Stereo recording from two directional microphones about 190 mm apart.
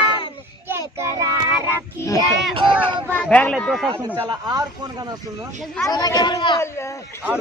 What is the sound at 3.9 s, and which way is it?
Speech, 25° right (ahead or behind).